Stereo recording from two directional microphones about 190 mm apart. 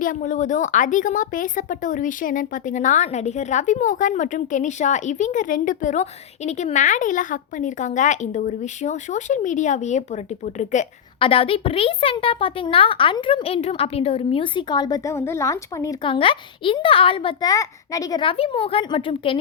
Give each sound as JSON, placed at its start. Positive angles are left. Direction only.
{"t": 0.0, "sound": "a woman's voice", "side_deg": 45}
{"t": 11.2, "sound": "a child's voice", "side_deg": 30}
{"t": 16.0, "sound": "a child's voice", "side_deg": 30}